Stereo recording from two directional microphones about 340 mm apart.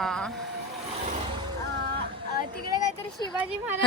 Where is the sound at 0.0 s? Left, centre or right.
Centre.